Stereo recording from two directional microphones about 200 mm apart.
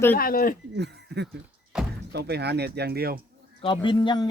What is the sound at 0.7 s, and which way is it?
Speech, 55° right (ahead or behind).